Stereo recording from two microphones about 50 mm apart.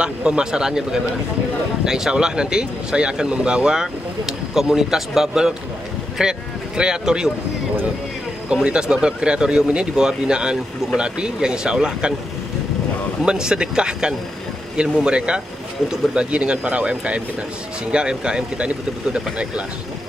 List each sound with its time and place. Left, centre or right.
0.0 s a man's voice: centre
8.6 s speech: centre
13.2 s speech: centre